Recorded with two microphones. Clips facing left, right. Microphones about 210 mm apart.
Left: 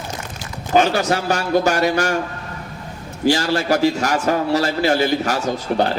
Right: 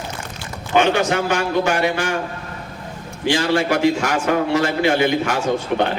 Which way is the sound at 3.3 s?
40° left (ahead or behind).